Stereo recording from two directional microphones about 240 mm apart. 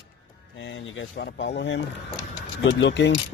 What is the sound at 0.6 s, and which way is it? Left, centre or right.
Speech, left.